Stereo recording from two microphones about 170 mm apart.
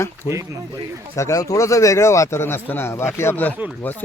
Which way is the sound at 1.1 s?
20° left (ahead or behind).